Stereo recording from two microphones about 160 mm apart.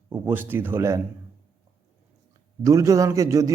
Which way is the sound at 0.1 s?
15° right (ahead or behind).